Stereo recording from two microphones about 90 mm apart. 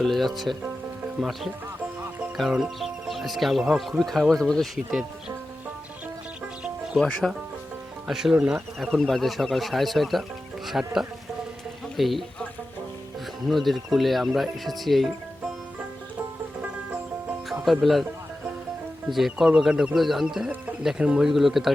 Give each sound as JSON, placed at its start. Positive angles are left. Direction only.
{"t": 0.0, "sound": "speech", "side_deg": 0}
{"t": 7.0, "sound": "speech", "side_deg": 0}
{"t": 8.8, "sound": "speech", "side_deg": 5}
{"t": 13.5, "sound": "speech", "side_deg": 0}
{"t": 17.5, "sound": "speech", "side_deg": 0}
{"t": 19.1, "sound": "speech", "side_deg": 0}